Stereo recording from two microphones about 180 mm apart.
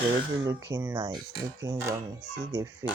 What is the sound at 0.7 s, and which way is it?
Speech, 15° right (ahead or behind).